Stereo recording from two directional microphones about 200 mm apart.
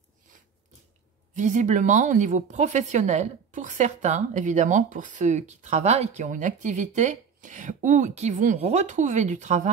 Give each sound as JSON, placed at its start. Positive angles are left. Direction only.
{"t": 1.3, "sound": "a woman's voice", "side_deg": -35}